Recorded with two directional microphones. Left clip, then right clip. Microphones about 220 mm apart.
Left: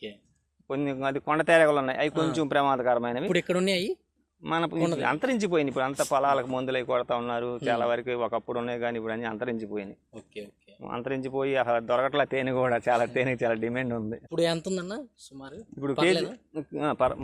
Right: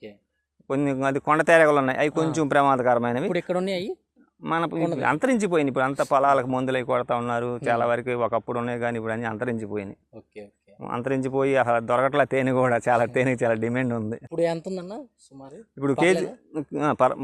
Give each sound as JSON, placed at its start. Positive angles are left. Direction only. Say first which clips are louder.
{"t": 0.7, "sound": "a man's voice", "louder": "right 5 dB", "side_deg": -40}
{"t": 3.3, "sound": "speech", "louder": "even", "side_deg": -10}
{"t": 4.4, "sound": "a man's voice", "louder": "right 2 dB", "side_deg": -35}
{"t": 14.3, "sound": "speech", "louder": "right 1 dB", "side_deg": -10}
{"t": 15.8, "sound": "a man's voice", "louder": "right 4 dB", "side_deg": -40}